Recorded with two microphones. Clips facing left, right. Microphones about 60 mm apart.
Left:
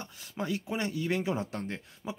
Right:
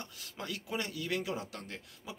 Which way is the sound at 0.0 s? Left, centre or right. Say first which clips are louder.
Left 7 dB; left.